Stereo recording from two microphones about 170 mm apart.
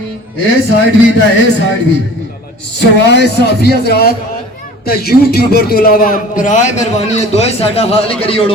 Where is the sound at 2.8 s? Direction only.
80° left.